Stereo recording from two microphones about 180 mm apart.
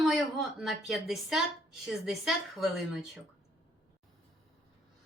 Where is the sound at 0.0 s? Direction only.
Centre (ahead or behind).